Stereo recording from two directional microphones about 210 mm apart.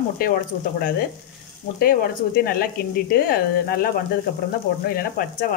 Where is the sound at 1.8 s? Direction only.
45° left (ahead or behind).